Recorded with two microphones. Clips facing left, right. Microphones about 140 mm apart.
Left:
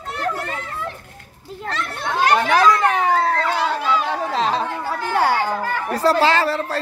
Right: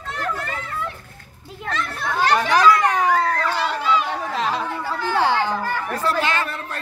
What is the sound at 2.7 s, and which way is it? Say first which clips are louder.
Children playing: left 1 dB; 30° left (ahead or behind).